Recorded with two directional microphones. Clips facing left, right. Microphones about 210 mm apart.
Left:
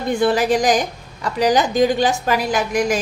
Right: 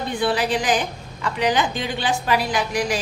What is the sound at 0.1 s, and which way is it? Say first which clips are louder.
A woman's voice: left 6 dB; 45° left (ahead or behind).